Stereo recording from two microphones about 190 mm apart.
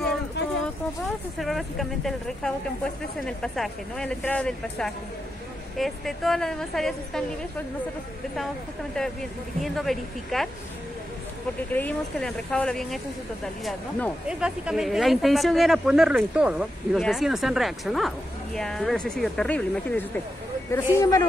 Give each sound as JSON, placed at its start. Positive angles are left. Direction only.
{"t": 1.4, "sound": "speech", "side_deg": 0}
{"t": 9.6, "sound": "speech", "side_deg": 0}
{"t": 11.7, "sound": "speech", "side_deg": 5}
{"t": 14.2, "sound": "speech", "side_deg": -5}